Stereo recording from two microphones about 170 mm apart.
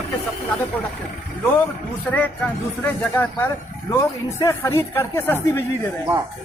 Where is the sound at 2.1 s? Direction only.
10° left (ahead or behind).